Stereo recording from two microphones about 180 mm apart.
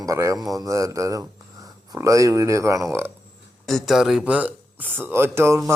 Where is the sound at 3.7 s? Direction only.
Centre (ahead or behind).